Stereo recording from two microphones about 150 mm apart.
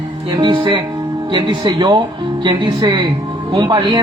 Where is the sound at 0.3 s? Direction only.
35° right (ahead or behind).